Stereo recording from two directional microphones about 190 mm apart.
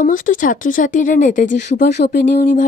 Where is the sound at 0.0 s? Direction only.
45° left (ahead or behind).